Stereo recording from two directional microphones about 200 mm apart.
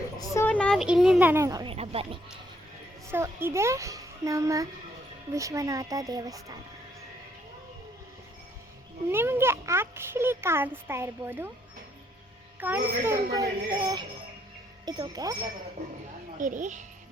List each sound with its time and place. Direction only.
0.2 s speech: 10° left (ahead or behind); by 1.7 s 15° right (ahead or behind)
1.7 s a sound: 30° right (ahead or behind)
3.1 s speech: 10° right (ahead or behind)
9.0 s speech: 10° right (ahead or behind)
12.5 s speech: 10° right (ahead or behind)
16.4 s a woman's voice: 40° right (ahead or behind)